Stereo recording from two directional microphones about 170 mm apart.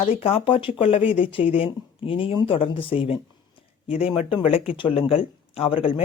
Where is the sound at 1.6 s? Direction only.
30° left (ahead or behind).